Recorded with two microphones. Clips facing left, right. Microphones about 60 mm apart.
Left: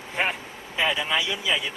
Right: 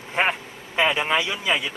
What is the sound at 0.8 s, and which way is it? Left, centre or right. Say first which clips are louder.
Speech: right 3 dB; right.